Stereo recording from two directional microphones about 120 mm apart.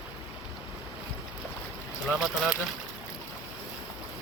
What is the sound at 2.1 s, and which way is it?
Speech, 5° right (ahead or behind).